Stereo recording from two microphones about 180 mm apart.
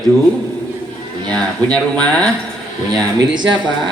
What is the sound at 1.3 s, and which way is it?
Speech, 5° left (ahead or behind).